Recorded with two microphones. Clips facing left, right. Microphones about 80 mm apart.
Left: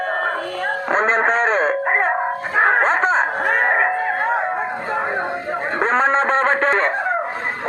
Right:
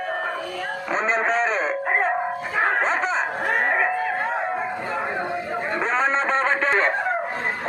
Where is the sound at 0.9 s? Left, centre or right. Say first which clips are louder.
Left 4 dB; left.